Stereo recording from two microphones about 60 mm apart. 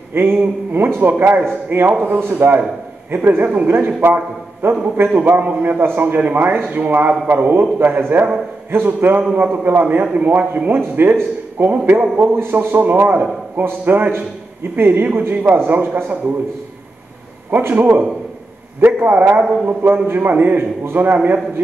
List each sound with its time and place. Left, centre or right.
0.1 s a man's voice: right
17.5 s a man's voice: right